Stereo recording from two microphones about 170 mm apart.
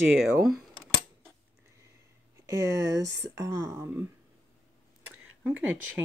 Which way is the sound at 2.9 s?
15° right (ahead or behind).